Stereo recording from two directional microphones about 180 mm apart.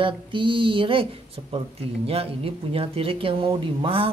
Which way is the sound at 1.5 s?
35° right (ahead or behind).